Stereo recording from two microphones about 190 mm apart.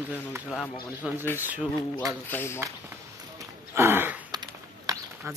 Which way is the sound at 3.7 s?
10° right (ahead or behind).